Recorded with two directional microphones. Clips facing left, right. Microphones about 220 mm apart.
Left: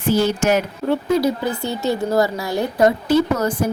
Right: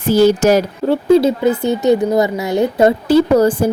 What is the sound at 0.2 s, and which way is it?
Speech, 40° right (ahead or behind).